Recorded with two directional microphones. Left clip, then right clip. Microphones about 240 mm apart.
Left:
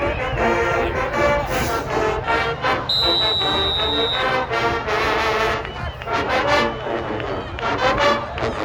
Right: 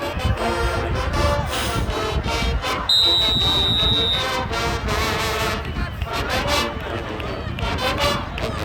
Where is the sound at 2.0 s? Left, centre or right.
Centre.